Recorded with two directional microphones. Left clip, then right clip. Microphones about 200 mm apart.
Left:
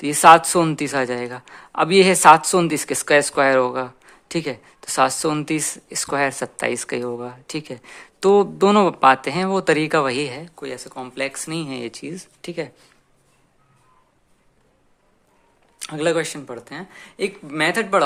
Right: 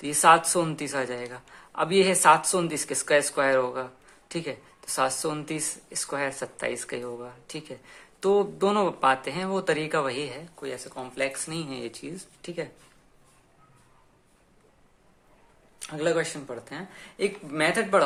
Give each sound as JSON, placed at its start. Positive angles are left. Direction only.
{"t": 0.0, "sound": "speech", "side_deg": 40}
{"t": 15.8, "sound": "speech", "side_deg": 40}